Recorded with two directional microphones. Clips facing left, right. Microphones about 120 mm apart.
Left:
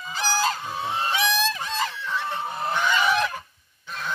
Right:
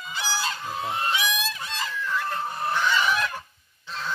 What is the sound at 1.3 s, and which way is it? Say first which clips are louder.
Honk: left 5 dB; 90° left.